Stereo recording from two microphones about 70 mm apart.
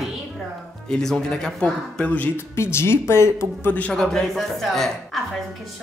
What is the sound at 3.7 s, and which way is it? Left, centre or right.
Speech, centre.